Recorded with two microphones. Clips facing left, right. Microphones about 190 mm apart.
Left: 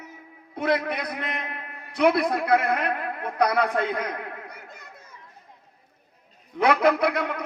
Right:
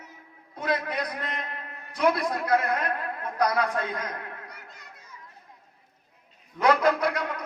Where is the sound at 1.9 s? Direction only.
65° left (ahead or behind).